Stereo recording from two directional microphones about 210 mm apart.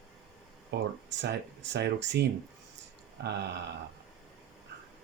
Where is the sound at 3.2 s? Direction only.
55° right (ahead or behind).